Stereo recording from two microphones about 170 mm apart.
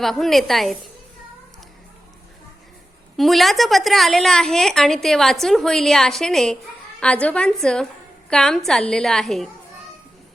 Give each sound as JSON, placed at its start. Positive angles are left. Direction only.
{"t": 0.0, "sound": "a woman's voice", "side_deg": 0}
{"t": 3.2, "sound": "a woman's voice", "side_deg": 0}